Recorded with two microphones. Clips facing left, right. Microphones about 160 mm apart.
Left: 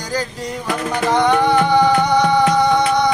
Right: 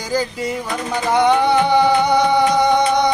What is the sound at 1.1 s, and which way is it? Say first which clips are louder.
Music: right 1 dB; 15° right (ahead or behind).